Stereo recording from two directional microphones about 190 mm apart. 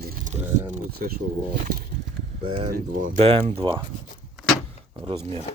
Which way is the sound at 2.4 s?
30° right (ahead or behind).